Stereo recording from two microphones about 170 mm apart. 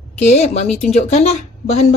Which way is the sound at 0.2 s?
40° left (ahead or behind).